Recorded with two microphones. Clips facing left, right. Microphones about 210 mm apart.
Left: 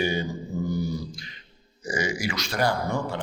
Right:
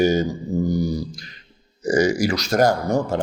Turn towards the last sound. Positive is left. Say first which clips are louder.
# right 7 dB
turn(degrees=-45)  # may be behind; listen again after turning